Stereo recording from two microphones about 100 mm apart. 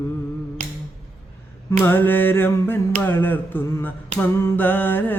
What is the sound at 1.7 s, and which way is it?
Mantra, 20° left (ahead or behind).